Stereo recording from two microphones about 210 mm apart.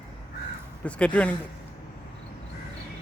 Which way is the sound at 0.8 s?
5° left (ahead or behind).